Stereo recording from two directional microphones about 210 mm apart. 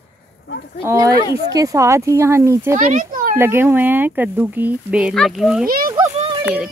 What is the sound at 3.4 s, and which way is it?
Speech, 10° right (ahead or behind).